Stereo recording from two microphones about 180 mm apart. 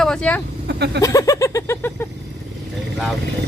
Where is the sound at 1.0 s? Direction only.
20° left (ahead or behind).